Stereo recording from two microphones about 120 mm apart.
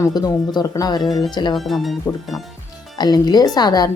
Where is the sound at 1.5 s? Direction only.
Centre (ahead or behind).